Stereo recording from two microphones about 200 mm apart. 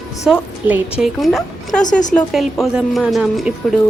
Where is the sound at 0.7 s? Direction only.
5° right (ahead or behind).